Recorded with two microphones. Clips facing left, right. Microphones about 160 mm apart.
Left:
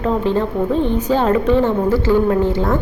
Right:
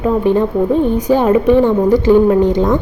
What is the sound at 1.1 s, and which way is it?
A woman's voice, 15° right (ahead or behind).